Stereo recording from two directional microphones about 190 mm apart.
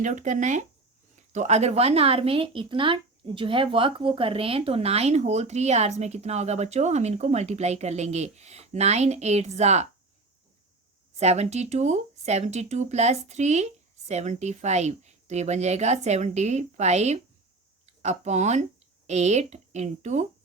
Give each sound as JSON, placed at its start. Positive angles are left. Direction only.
{"t": 0.0, "sound": "speech", "side_deg": -40}
{"t": 11.2, "sound": "speech", "side_deg": -35}